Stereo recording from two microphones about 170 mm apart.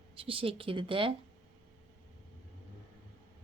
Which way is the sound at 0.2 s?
35° right (ahead or behind).